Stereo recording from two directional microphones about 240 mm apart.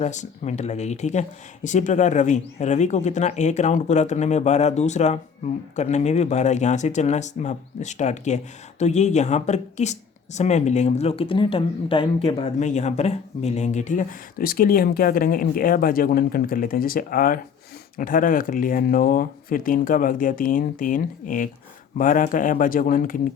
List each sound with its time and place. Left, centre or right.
0.0 s speech: left